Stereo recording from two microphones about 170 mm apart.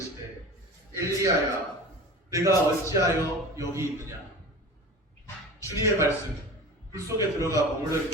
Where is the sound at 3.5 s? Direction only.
15° right (ahead or behind).